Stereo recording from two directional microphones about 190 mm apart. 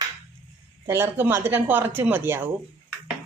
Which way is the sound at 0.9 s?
15° right (ahead or behind).